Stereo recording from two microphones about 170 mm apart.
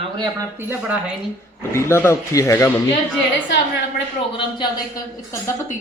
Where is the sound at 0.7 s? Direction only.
10° right (ahead or behind).